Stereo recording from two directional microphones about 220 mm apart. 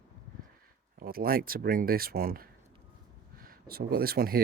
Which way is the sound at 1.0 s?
45° right (ahead or behind).